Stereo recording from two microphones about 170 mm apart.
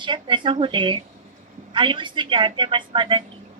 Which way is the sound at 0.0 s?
30° right (ahead or behind).